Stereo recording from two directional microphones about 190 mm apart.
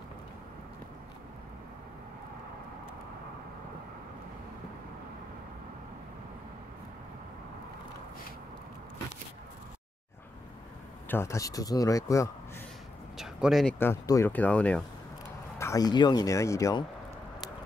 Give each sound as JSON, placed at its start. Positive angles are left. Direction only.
{"t": 11.1, "sound": "speech", "side_deg": 15}
{"t": 13.2, "sound": "speech", "side_deg": 0}
{"t": 13.7, "sound": "speech", "side_deg": 15}
{"t": 15.6, "sound": "speech", "side_deg": 20}